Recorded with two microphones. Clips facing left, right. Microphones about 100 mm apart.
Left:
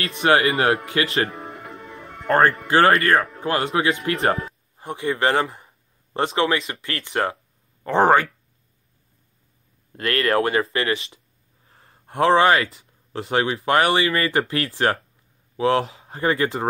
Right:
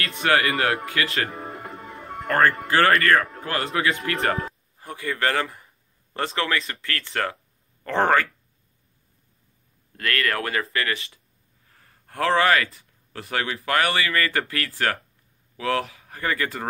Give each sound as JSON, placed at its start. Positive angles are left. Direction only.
{"t": 0.0, "sound": "speech", "side_deg": 20}
{"t": 1.3, "sound": "music", "side_deg": 0}
{"t": 2.2, "sound": "speech", "side_deg": 25}
{"t": 9.9, "sound": "speech", "side_deg": 25}
{"t": 11.6, "sound": "a sound", "side_deg": 25}
{"t": 12.7, "sound": "speech", "side_deg": 25}